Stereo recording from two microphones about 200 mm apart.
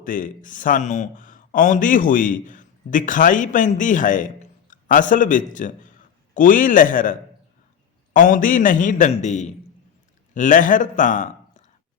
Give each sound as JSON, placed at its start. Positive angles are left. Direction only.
{"t": 0.0, "sound": "a man's voice", "side_deg": 40}